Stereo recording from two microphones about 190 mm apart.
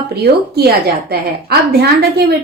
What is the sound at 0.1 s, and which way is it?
A woman's voice, 60° right (ahead or behind).